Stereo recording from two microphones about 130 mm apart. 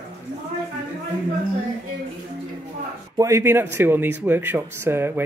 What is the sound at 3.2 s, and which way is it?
A woman's voice, 25° right (ahead or behind).